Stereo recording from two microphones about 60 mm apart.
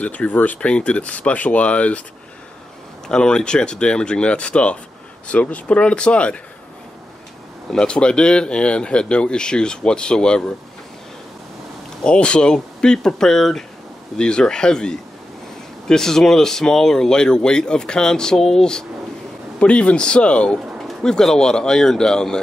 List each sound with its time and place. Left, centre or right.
0.0 s speech: left
3.1 s speech: centre
7.7 s speech: centre
12.0 s speech: centre